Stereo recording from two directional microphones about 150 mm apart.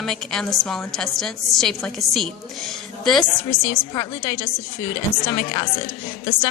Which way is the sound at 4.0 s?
25° left (ahead or behind).